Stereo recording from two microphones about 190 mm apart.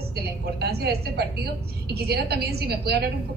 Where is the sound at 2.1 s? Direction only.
60° right (ahead or behind).